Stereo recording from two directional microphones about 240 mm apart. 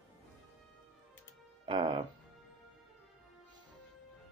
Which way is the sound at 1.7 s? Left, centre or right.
Centre.